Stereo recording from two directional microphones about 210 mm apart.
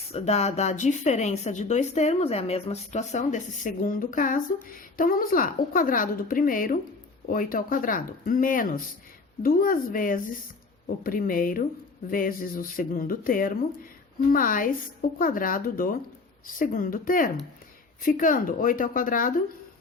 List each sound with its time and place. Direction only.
0.1 s a woman's voice: 30° left (ahead or behind)